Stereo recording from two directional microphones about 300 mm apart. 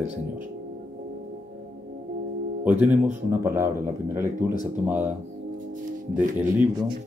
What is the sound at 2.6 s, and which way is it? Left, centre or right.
Speech, centre.